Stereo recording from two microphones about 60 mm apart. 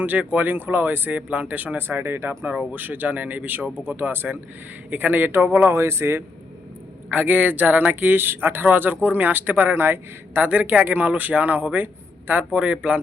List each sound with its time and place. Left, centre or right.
0.0 s speech: right
2.7 s speech: right
5.6 s speech: right
7.1 s speech: right
10.4 s speech: right
12.5 s speech: centre